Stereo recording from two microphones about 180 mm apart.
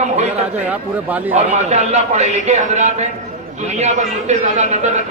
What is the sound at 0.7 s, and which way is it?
Speech, 10° right (ahead or behind).